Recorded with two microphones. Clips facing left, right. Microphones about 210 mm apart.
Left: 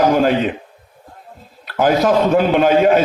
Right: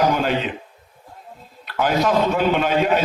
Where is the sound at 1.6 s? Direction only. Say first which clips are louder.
Left 5 dB; 45° left (ahead or behind).